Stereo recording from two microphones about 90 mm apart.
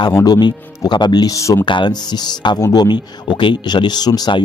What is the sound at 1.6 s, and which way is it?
Speech, 60° left (ahead or behind).